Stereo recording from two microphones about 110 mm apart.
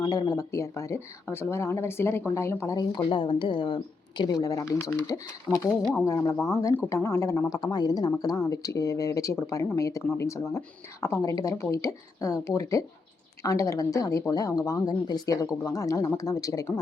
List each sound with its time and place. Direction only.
0.0 s speech: 30° left (ahead or behind)